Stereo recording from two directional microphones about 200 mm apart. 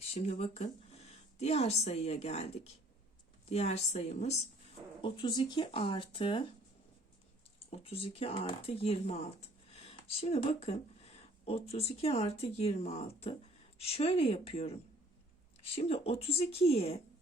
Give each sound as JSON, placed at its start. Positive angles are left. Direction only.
{"t": 0.1, "sound": "a woman's voice", "side_deg": 30}
{"t": 7.7, "sound": "a woman's voice", "side_deg": 30}